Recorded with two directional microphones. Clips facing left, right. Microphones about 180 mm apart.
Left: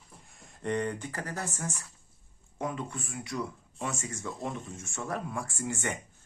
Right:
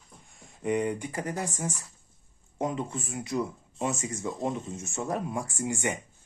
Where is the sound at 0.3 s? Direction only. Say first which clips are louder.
Right 3 dB; 5° right (ahead or behind).